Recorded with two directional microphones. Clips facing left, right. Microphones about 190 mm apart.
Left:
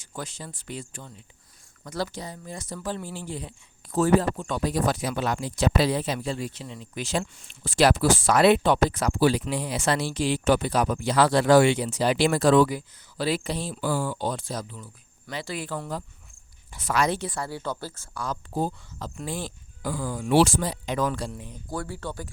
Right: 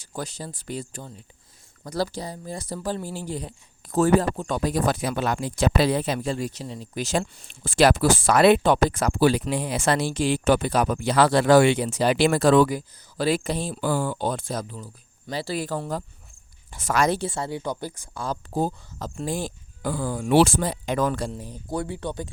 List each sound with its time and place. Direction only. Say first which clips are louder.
0.0 s speech: right 4 dB; 40° right (ahead or behind); by 6.1 s 55° right (ahead or behind)
6.1 s speech: right 3 dB; 45° right (ahead or behind)
15.3 s speech: right 4 dB; 35° right (ahead or behind)
17.2 s speech: right 3 dB; 25° right (ahead or behind)
18.5 s speech: right 3 dB; 45° right (ahead or behind)
21.7 s speech: right 4 dB; 20° right (ahead or behind)